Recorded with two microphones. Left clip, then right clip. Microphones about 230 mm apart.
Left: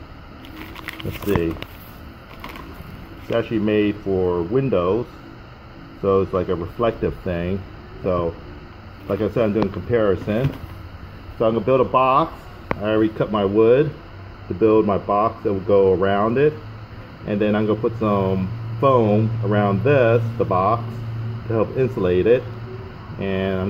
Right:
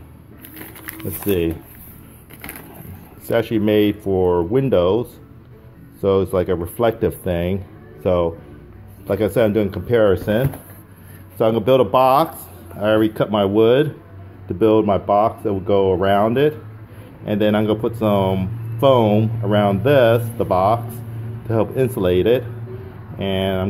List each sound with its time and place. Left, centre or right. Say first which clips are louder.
3.3 s speech: right 3 dB; right
6.0 s speech: right 2 dB; right